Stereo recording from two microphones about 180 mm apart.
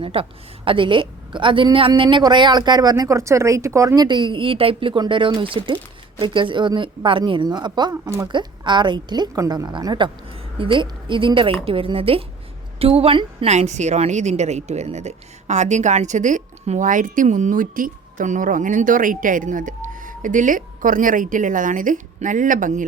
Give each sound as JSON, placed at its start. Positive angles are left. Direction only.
{"t": 0.0, "sound": "a woman's voice", "side_deg": -30}